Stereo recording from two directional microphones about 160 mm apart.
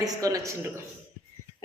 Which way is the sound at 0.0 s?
20° right (ahead or behind).